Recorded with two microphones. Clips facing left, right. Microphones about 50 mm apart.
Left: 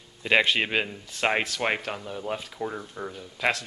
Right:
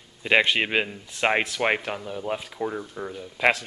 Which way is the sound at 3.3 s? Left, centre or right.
Right.